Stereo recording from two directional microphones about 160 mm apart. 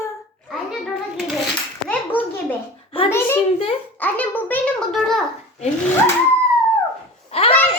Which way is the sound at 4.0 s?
10° left (ahead or behind).